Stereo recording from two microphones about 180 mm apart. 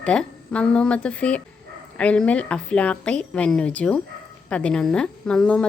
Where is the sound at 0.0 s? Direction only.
5° left (ahead or behind).